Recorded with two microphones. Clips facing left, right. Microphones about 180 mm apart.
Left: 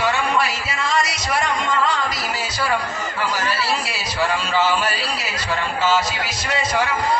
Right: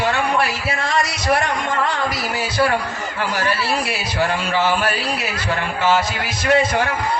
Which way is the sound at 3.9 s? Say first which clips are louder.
Right 2 dB; 60° right (ahead or behind).